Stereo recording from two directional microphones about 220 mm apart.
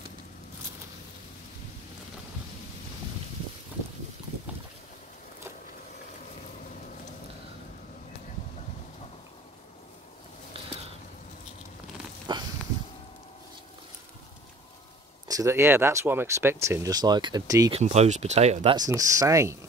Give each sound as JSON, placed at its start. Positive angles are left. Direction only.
{"t": 12.3, "sound": "a sound", "side_deg": -20}
{"t": 15.2, "sound": "speech", "side_deg": -15}
{"t": 17.7, "sound": "speech", "side_deg": -30}
{"t": 18.8, "sound": "speech", "side_deg": -15}